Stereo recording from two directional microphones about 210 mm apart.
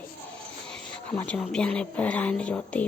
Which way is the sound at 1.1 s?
10° left (ahead or behind).